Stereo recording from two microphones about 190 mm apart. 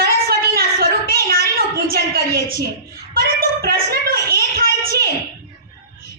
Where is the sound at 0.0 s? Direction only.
50° right (ahead or behind).